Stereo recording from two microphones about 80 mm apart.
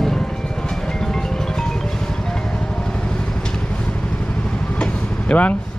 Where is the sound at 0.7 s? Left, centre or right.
Centre.